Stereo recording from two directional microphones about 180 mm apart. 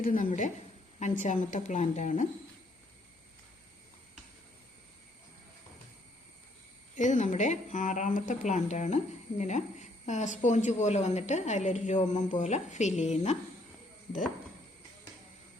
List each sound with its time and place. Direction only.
0.0 s a woman's voice: 50° left (ahead or behind)
6.9 s a woman's voice: 40° left (ahead or behind)